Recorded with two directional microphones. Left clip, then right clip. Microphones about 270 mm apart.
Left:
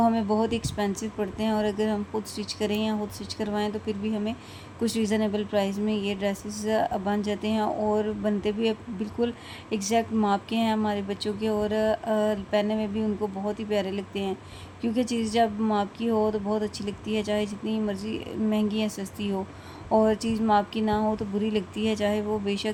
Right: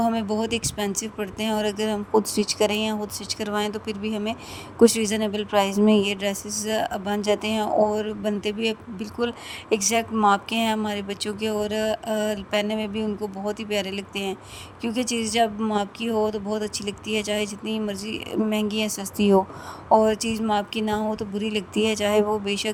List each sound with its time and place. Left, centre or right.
0.0 s speech: right